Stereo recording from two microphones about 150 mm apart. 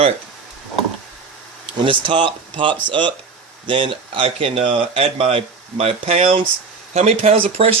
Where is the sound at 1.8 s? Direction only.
35° right (ahead or behind).